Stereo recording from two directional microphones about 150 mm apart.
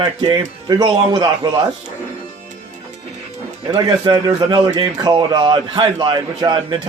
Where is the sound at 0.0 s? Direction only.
30° right (ahead or behind).